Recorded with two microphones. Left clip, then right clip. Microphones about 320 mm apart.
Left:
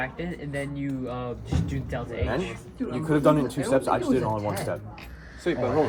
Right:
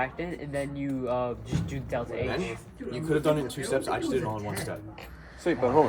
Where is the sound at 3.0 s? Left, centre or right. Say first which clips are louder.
Left 4 dB; centre.